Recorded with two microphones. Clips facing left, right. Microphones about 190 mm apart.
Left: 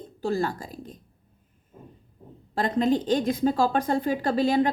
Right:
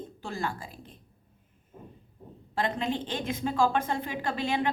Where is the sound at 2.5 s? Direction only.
40° left (ahead or behind).